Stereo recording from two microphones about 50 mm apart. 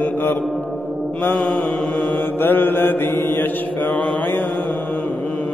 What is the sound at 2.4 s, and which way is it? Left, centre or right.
Mantra, left.